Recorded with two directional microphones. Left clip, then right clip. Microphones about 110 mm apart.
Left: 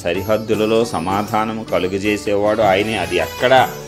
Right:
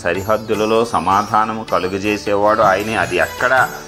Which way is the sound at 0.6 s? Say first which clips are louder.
Right 2 dB; 70° left (ahead or behind).